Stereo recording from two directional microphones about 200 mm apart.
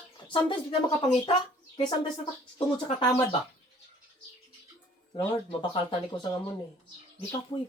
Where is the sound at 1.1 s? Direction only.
30° left (ahead or behind).